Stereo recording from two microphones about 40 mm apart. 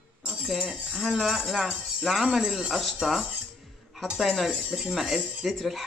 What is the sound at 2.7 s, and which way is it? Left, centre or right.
Speech, centre.